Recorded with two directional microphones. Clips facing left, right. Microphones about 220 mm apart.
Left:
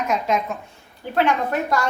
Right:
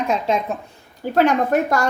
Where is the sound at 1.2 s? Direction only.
45° right (ahead or behind).